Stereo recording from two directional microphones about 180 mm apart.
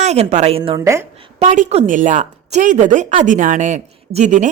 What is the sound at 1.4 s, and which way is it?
A woman's voice, 40° right (ahead or behind).